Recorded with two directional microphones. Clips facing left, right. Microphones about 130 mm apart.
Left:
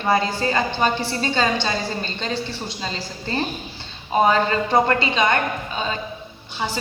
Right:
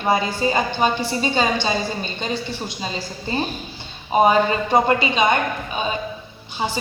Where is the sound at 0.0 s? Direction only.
15° right (ahead or behind).